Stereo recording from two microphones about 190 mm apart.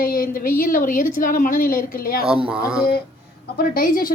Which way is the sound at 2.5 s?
5° right (ahead or behind).